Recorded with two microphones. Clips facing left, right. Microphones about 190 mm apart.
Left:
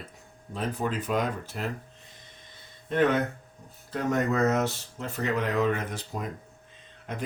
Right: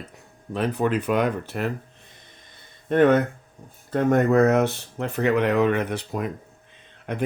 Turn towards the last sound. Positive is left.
turn(degrees=-65)  # may be behind; listen again after turning